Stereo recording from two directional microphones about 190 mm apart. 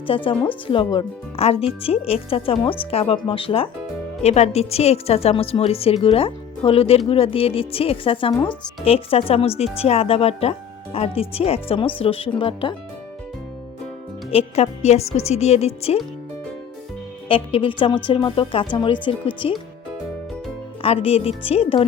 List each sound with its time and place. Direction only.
0.1 s a woman's voice: 25° left (ahead or behind)
14.3 s a woman's voice: 35° left (ahead or behind)
17.2 s speech: 30° left (ahead or behind)
20.8 s a woman's voice: 30° left (ahead or behind)